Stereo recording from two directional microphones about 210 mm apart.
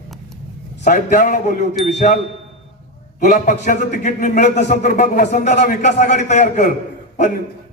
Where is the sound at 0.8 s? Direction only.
35° left (ahead or behind).